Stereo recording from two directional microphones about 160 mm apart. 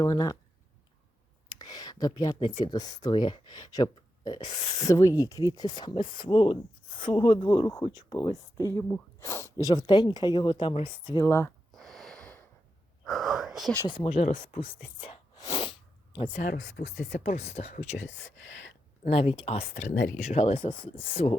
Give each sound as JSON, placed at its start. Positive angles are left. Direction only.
{"t": 0.0, "sound": "speech", "side_deg": 25}
{"t": 1.5, "sound": "a sound", "side_deg": 25}
{"t": 2.6, "sound": "speech", "side_deg": 25}
{"t": 11.3, "sound": "speech", "side_deg": 15}
{"t": 11.7, "sound": "a sound", "side_deg": 0}
{"t": 13.1, "sound": "whispering", "side_deg": 0}
{"t": 13.8, "sound": "speech", "side_deg": 35}
{"t": 15.4, "sound": "sneeze", "side_deg": 35}
{"t": 16.3, "sound": "speech", "side_deg": 70}
{"t": 17.2, "sound": "speech", "side_deg": 45}
{"t": 19.0, "sound": "speech", "side_deg": 40}